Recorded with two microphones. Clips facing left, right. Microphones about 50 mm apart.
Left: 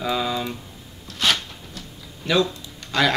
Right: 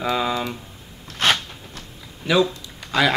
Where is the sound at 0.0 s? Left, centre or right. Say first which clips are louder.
Right 2 dB; centre.